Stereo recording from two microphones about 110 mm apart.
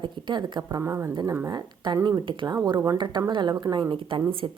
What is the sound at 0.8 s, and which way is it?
Speech, 20° right (ahead or behind).